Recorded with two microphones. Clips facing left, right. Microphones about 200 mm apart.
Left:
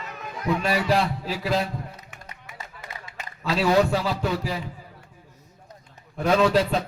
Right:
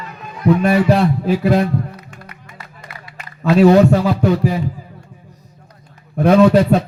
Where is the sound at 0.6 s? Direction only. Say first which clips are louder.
Right 7 dB; 60° right (ahead or behind).